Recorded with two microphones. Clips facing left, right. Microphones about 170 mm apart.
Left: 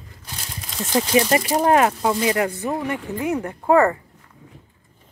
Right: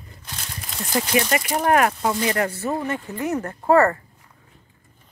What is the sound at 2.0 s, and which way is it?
Speech, 10° left (ahead or behind).